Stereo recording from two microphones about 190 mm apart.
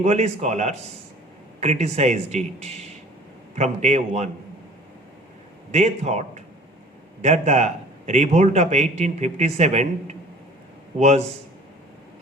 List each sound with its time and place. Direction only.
0.0 s a man's voice: 35° right (ahead or behind)
5.7 s a man's voice: 35° right (ahead or behind)